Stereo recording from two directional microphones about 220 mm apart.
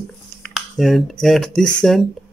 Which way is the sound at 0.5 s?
Centre (ahead or behind).